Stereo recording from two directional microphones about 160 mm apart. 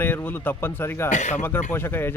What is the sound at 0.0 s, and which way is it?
Speech, 10° left (ahead or behind).